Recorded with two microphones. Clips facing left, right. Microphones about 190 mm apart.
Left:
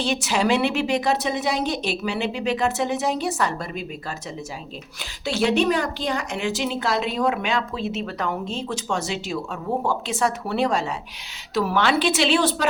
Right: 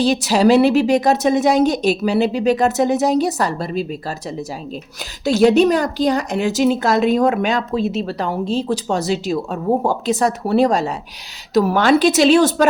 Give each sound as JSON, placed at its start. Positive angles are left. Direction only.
{"t": 0.0, "sound": "a woman's voice", "side_deg": -35}
{"t": 5.2, "sound": "a woman's voice", "side_deg": -40}